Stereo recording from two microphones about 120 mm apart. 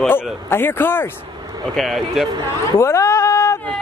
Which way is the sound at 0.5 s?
20° left (ahead or behind).